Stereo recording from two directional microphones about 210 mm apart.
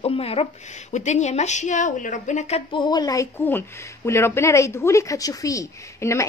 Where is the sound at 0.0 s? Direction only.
30° left (ahead or behind).